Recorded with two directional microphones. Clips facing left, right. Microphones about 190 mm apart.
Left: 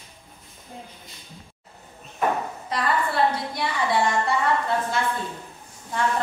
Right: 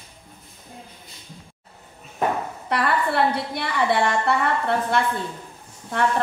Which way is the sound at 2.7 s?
65° right (ahead or behind).